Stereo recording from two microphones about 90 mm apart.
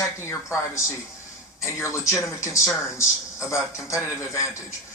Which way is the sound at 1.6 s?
35° left (ahead or behind).